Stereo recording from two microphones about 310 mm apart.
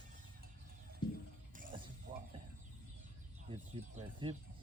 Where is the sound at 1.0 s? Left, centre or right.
Centre.